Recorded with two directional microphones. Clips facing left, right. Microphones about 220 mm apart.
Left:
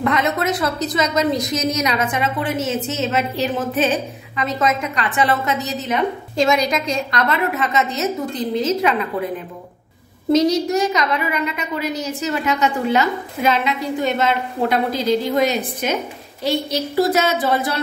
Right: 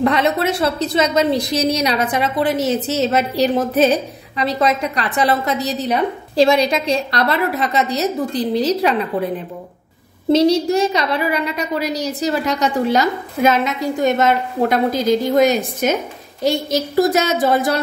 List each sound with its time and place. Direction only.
0.0 s a woman's voice: 30° right (ahead or behind)
10.3 s a woman's voice: 30° right (ahead or behind); by 17.7 s 45° right (ahead or behind)